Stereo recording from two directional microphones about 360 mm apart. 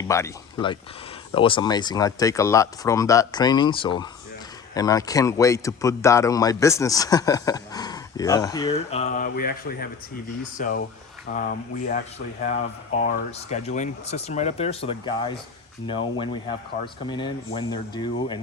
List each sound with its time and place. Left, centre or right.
0.1 s speech: centre